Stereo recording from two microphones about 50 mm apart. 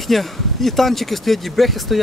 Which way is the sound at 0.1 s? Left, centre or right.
Centre.